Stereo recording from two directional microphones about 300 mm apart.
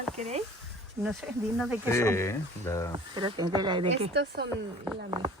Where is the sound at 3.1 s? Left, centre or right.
Centre.